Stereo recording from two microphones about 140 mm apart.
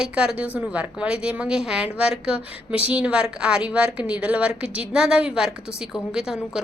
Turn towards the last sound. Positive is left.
turn(degrees=-5)  # may be behind; listen again after turning